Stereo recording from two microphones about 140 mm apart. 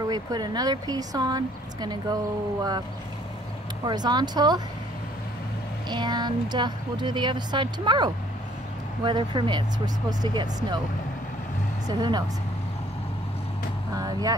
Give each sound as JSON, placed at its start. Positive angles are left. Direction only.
{"t": 0.1, "sound": "speech", "side_deg": -30}
{"t": 3.8, "sound": "speech", "side_deg": -30}
{"t": 5.9, "sound": "a woman's voice", "side_deg": -30}
{"t": 11.9, "sound": "a woman's voice", "side_deg": -30}
{"t": 13.9, "sound": "speech", "side_deg": -25}